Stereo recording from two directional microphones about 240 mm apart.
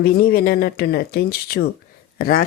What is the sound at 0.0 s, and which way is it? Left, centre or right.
Speech, left.